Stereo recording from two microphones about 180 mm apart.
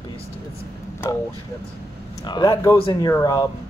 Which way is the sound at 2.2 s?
25° left (ahead or behind).